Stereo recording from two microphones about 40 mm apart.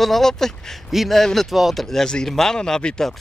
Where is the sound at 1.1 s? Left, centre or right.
Centre.